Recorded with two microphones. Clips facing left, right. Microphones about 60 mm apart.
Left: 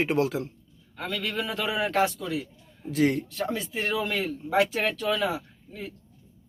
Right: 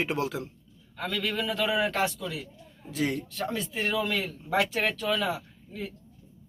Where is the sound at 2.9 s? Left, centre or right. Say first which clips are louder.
Left 6 dB; left.